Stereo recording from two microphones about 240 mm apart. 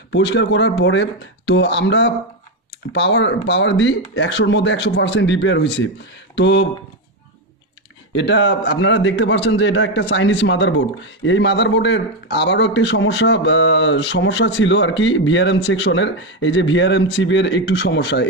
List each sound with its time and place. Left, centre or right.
0.1 s a man's voice: left
8.1 s a man's voice: left